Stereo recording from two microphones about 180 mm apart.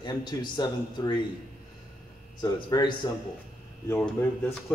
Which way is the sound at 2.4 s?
25° left (ahead or behind).